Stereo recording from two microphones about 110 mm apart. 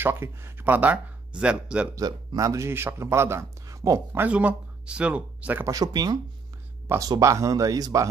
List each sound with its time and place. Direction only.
0.0 s speech: 20° right (ahead or behind)
2.0 s speech: 30° right (ahead or behind)
4.2 s speech: 10° right (ahead or behind)
5.7 s speech: 35° right (ahead or behind)